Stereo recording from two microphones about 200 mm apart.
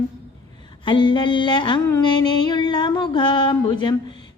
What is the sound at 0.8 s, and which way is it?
A woman's voice, 25° left (ahead or behind).